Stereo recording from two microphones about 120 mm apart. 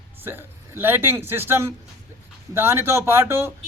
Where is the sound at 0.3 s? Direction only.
15° right (ahead or behind).